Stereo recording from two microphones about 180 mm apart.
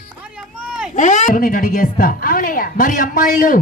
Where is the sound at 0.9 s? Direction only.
45° left (ahead or behind).